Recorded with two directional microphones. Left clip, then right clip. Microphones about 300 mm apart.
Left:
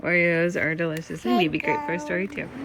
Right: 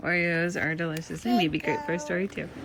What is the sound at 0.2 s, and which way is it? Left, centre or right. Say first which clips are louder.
Speech: left 5 dB; right.